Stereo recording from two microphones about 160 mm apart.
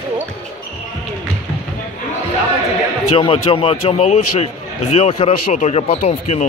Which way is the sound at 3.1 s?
35° left (ahead or behind).